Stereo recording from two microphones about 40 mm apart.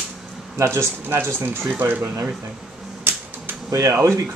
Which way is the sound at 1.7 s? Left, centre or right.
Right.